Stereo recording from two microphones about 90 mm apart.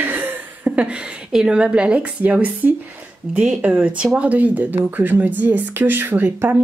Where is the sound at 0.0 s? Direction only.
20° right (ahead or behind).